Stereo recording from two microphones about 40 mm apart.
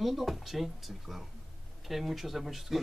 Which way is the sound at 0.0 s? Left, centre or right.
Centre.